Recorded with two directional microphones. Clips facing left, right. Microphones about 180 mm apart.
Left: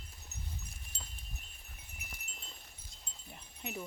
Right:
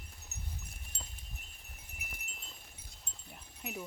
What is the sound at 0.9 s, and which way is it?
Wind chime, 60° right (ahead or behind).